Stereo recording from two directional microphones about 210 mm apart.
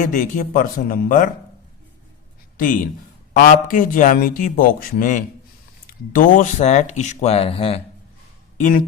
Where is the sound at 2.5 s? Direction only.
40° left (ahead or behind).